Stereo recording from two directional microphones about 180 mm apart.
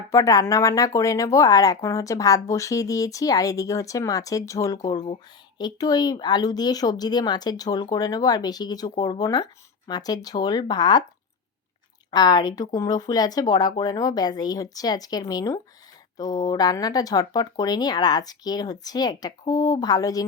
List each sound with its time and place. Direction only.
0.1 s speech: 20° left (ahead or behind)
12.1 s speech: 20° left (ahead or behind)